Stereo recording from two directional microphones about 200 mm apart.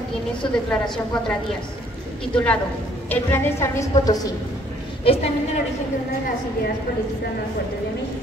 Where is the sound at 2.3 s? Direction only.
5° left (ahead or behind).